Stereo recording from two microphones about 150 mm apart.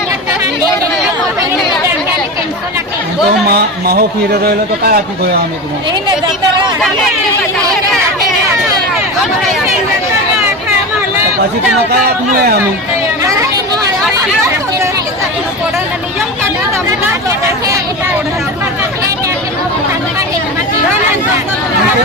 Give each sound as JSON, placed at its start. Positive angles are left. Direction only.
{"t": 3.5, "sound": "a man's voice", "side_deg": -90}